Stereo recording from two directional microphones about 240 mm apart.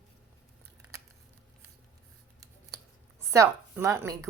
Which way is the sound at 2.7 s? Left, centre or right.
Centre.